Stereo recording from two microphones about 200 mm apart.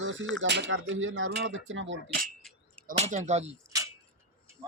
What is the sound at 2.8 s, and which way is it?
Speech, 35° right (ahead or behind).